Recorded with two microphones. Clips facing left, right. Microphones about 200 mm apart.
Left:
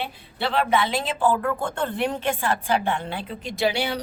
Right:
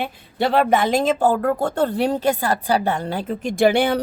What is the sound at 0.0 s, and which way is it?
Speech, 45° right (ahead or behind).